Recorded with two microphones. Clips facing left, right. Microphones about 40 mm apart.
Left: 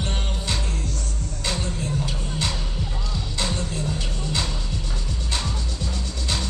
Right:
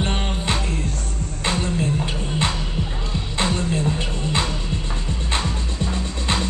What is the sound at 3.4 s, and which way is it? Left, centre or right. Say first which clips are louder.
Music: right 6 dB; right.